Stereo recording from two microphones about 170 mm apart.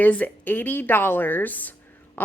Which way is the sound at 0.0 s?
10° left (ahead or behind).